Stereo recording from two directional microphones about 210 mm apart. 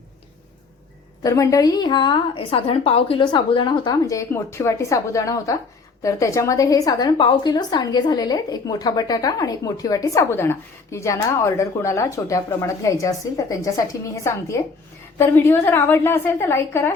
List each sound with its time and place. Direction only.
1.2 s a woman's voice: 15° left (ahead or behind)